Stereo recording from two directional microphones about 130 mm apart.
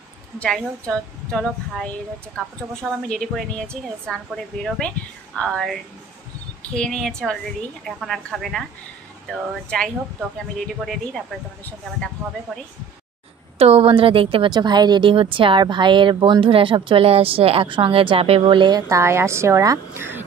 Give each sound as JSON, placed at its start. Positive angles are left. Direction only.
{"t": 0.4, "sound": "a woman's voice", "side_deg": 5}
{"t": 13.6, "sound": "a woman's voice", "side_deg": -50}